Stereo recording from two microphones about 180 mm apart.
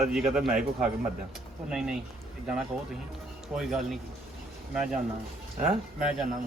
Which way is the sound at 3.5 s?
5° right (ahead or behind).